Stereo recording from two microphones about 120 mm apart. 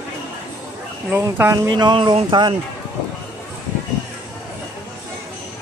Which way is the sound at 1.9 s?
40° right (ahead or behind).